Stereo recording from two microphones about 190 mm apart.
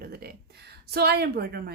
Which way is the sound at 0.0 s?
55° right (ahead or behind).